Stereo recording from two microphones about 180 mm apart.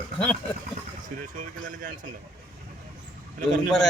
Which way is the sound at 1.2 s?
45° right (ahead or behind).